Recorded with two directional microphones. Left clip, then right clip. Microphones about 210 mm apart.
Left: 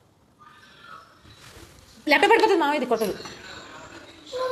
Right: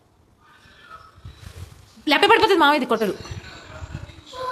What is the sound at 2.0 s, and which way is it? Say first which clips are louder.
A woman's voice: right 2 dB; 25° right (ahead or behind).